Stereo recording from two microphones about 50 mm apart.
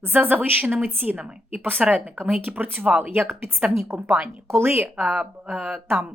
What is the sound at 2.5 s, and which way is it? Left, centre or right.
Speech, right.